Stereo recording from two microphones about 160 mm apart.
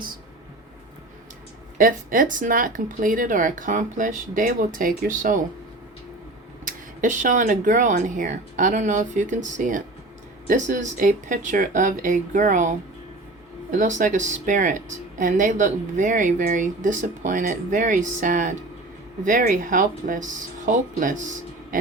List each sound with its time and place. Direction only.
1.8 s speech: 60° right (ahead or behind)
6.7 s a woman's voice: 55° right (ahead or behind)